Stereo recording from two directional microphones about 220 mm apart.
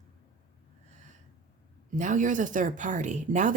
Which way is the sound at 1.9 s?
35° right (ahead or behind).